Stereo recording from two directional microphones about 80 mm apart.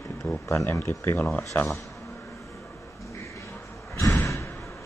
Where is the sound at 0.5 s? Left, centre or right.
Left.